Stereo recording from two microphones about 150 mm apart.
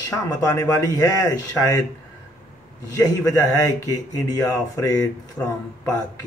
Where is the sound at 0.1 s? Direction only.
25° left (ahead or behind).